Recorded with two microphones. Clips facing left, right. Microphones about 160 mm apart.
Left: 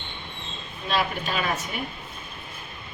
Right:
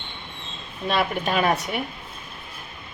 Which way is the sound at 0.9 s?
60° right (ahead or behind).